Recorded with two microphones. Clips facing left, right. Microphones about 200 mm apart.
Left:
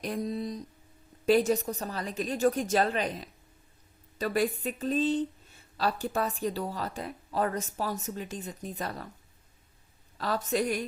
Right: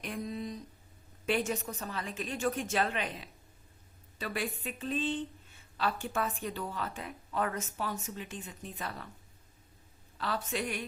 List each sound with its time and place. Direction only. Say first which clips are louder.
0.0 s speech: left 5 dB; 35° left (ahead or behind)
10.2 s speech: left 6 dB; 40° left (ahead or behind)